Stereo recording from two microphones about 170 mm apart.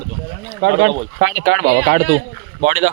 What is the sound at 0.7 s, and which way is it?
Speech, 90° right.